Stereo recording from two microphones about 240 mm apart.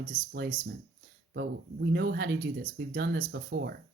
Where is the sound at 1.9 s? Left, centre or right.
Right.